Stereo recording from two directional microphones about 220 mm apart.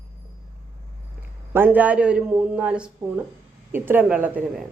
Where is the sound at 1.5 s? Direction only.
10° right (ahead or behind).